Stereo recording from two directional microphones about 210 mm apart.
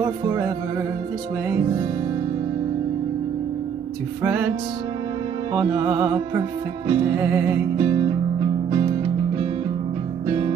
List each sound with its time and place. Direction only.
0.0 s music: 10° right (ahead or behind)
4.2 s music: 5° right (ahead or behind)
5.7 s music: 20° right (ahead or behind)
10.2 s music: 20° right (ahead or behind)